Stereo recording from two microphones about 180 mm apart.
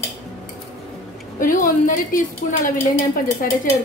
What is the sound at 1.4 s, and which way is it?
Speech, 50° left (ahead or behind).